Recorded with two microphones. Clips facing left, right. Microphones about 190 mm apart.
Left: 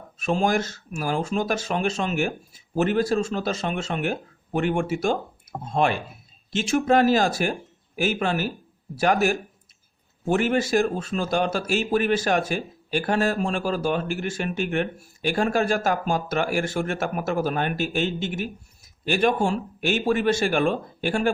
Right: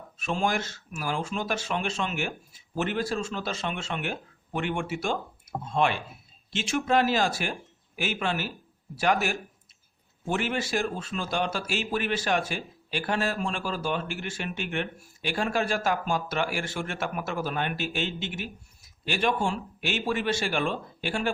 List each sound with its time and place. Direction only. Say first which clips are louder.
0.2 s speech: left 5 dB; 40° left (ahead or behind)